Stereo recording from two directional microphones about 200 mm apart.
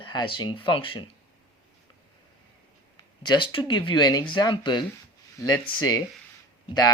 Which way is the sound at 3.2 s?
25° left (ahead or behind).